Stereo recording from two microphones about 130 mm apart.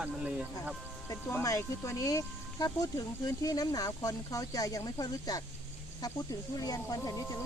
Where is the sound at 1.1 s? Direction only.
25° left (ahead or behind).